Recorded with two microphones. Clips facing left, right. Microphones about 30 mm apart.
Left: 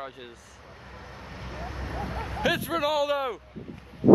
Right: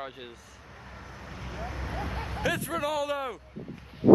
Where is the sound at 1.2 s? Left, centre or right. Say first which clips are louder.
Even; left.